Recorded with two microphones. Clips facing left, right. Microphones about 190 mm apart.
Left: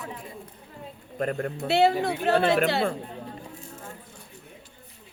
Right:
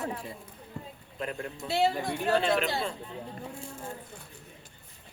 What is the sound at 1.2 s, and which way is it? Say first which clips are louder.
Speech: left 8 dB; 55° left (ahead or behind).